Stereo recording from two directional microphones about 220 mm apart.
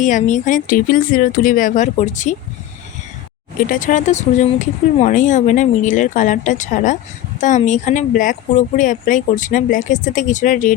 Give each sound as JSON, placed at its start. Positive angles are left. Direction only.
{"t": 0.0, "sound": "speech", "side_deg": 35}
{"t": 3.6, "sound": "speech", "side_deg": 40}